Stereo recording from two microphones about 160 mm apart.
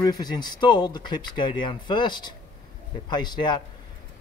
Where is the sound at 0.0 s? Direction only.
25° left (ahead or behind).